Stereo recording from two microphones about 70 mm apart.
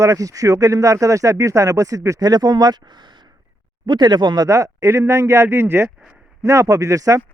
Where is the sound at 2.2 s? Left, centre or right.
Right.